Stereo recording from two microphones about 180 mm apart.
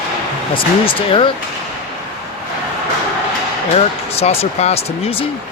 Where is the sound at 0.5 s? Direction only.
30° left (ahead or behind).